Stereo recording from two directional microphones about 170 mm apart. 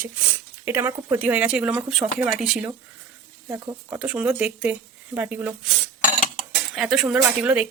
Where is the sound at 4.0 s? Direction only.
10° right (ahead or behind).